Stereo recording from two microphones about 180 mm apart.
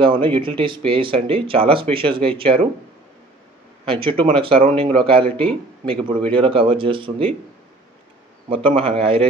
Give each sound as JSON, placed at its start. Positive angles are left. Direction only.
{"t": 0.0, "sound": "speech", "side_deg": -30}
{"t": 3.8, "sound": "speech", "side_deg": -30}
{"t": 8.6, "sound": "a man's voice", "side_deg": -30}